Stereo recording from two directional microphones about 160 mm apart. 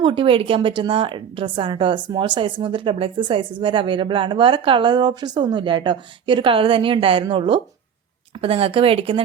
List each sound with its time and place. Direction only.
0.0 s speech: 35° right (ahead or behind)